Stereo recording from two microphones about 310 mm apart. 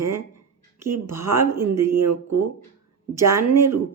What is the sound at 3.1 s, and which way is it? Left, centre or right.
Speech, centre.